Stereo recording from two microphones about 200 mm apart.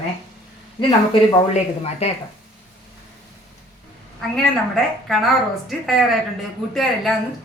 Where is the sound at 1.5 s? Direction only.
30° left (ahead or behind).